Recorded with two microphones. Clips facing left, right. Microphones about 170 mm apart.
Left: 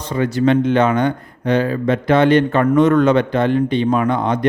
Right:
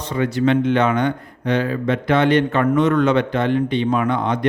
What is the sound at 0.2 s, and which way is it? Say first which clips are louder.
Speech: left 2 dB; 40° left (ahead or behind).